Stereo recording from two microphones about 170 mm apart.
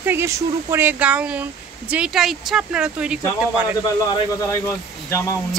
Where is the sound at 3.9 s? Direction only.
20° left (ahead or behind).